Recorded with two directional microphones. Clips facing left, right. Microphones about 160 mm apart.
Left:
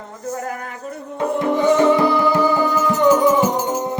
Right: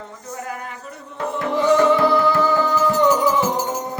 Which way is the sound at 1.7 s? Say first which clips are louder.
Right 1 dB; 15° left (ahead or behind).